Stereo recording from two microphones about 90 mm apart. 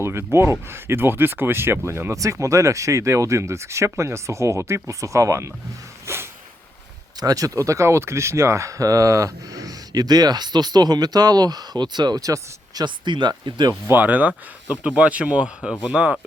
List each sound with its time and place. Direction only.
0.0 s speech: 30° right (ahead or behind)
6.1 s a sound: 30° right (ahead or behind)
7.2 s speech: 45° right (ahead or behind)
12.8 s speech: 55° right (ahead or behind)
13.8 s speech: 20° right (ahead or behind)